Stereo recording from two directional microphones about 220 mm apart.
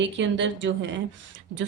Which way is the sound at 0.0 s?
55° right (ahead or behind).